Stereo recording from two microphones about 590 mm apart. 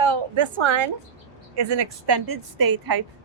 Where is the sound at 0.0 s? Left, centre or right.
Right.